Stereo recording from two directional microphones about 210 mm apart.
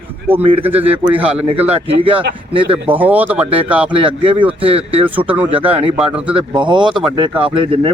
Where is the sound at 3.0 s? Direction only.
10° right (ahead or behind).